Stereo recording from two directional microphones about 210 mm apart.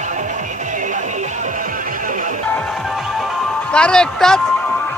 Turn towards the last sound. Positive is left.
turn(degrees=5)  # may be behind; listen again after turning